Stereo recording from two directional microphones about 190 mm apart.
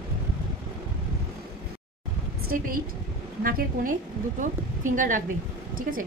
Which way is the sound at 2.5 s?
45° right (ahead or behind).